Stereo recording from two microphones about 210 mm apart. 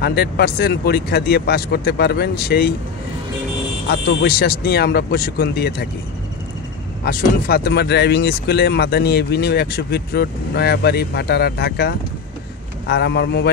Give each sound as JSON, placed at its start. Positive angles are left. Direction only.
{"t": 0.0, "sound": "speech", "side_deg": 50}
{"t": 3.8, "sound": "speech", "side_deg": 50}
{"t": 7.1, "sound": "speech", "side_deg": 45}